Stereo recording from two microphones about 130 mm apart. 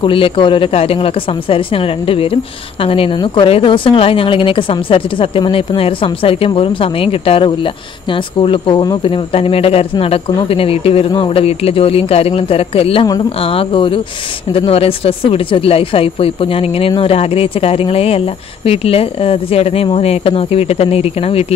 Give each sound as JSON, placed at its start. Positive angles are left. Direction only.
{"t": 0.0, "sound": "speech", "side_deg": 40}
{"t": 13.0, "sound": "speech", "side_deg": 30}
{"t": 13.4, "sound": "speech", "side_deg": 45}